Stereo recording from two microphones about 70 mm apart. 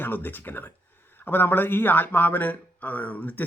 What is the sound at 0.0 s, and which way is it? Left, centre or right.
Speech, left.